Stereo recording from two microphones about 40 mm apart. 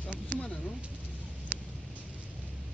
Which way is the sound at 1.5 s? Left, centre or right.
Right.